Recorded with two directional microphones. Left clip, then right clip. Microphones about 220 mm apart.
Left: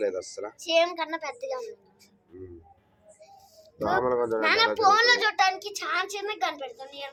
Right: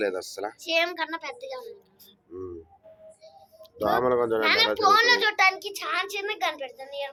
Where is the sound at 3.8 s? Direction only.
15° right (ahead or behind).